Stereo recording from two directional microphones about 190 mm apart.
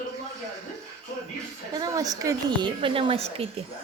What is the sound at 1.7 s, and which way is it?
A woman's voice, 20° right (ahead or behind).